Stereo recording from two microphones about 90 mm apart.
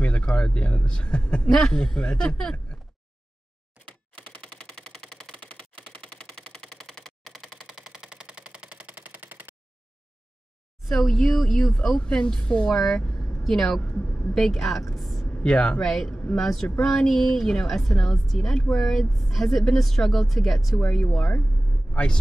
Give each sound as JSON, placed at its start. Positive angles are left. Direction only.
{"t": 0.0, "sound": "speech", "side_deg": 15}
{"t": 3.7, "sound": "typewriter", "side_deg": -15}
{"t": 4.7, "sound": "a sound", "side_deg": 5}
{"t": 6.1, "sound": "machine gun", "side_deg": 5}
{"t": 11.1, "sound": "a woman's voice", "side_deg": 5}
{"t": 14.9, "sound": "vehicle", "side_deg": 0}
{"t": 15.4, "sound": "a woman's voice", "side_deg": 10}